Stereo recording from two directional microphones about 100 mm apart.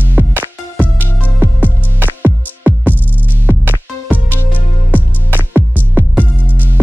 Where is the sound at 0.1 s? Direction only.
20° right (ahead or behind).